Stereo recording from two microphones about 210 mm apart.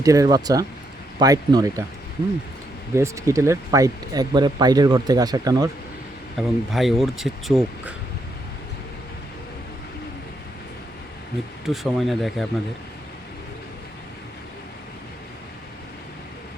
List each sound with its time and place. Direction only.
0.0 s speech: 15° right (ahead or behind)
2.9 s speech: 15° right (ahead or behind)
6.3 s speech: centre (ahead or behind)
11.6 s speech: centre (ahead or behind)